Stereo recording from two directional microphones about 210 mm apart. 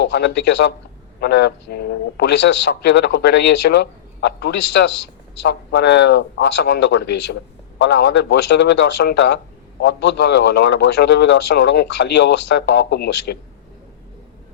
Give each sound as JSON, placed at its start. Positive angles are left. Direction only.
{"t": 0.0, "sound": "a man's voice", "side_deg": 55}